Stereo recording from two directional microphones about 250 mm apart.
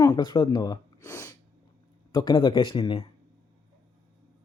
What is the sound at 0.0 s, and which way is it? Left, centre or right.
Speech, centre.